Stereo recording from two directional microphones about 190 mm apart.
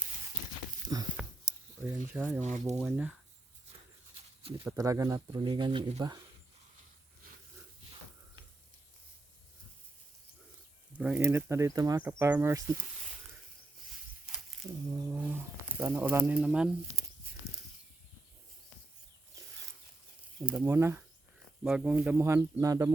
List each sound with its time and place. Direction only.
0.9 s speech: 20° right (ahead or behind)
1.5 s a sound: 15° right (ahead or behind)
2.4 s speech: 35° right (ahead or behind)
2.7 s speech: 5° right (ahead or behind)
4.6 s speech: 15° right (ahead or behind)
10.9 s speech: 5° right (ahead or behind)
15.2 s pigeon: 10° right (ahead or behind)
19.4 s a sound: 15° right (ahead or behind)
20.6 s speech: 15° right (ahead or behind)